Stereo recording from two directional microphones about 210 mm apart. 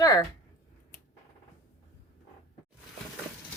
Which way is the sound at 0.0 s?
15° left (ahead or behind).